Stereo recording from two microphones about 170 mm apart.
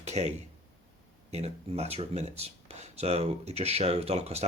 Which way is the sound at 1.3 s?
40° right (ahead or behind).